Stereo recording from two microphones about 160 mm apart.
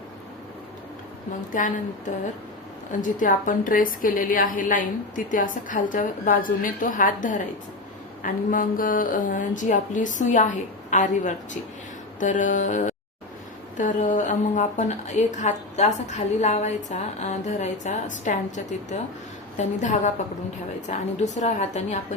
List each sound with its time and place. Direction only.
1.5 s a woman's voice: 55° left (ahead or behind)
21.3 s a woman's voice: 45° left (ahead or behind)